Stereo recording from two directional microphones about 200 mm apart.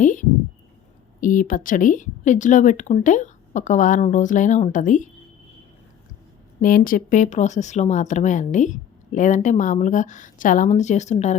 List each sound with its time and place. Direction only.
0.0 s a sound: 40° left (ahead or behind)
1.2 s speech: 40° left (ahead or behind)
6.6 s speech: 45° left (ahead or behind)